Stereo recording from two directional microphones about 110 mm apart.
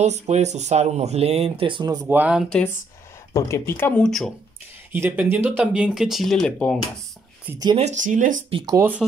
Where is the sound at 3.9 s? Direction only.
5° left (ahead or behind).